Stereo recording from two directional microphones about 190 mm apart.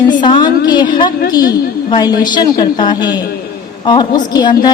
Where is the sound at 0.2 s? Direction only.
25° left (ahead or behind).